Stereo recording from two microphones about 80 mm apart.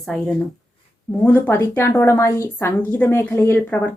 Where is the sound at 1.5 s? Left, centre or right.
Left.